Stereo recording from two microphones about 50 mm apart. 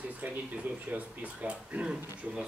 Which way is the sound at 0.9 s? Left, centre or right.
Right.